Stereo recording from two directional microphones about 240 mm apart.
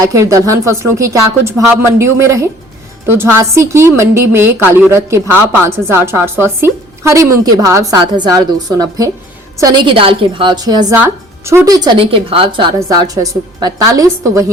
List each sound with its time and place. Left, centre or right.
0.0 s a woman's voice: centre